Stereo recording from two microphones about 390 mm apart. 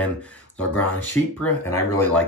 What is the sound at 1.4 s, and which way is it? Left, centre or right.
Speech, centre.